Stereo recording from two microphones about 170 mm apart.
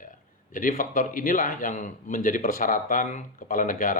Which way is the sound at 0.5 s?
50° left (ahead or behind).